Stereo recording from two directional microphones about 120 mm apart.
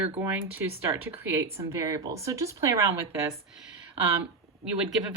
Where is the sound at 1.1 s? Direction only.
20° right (ahead or behind).